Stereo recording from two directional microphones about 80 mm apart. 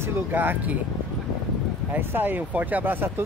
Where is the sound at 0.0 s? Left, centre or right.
Right.